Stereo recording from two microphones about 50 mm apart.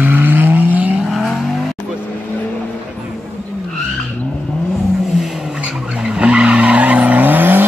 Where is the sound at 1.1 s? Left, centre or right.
Centre.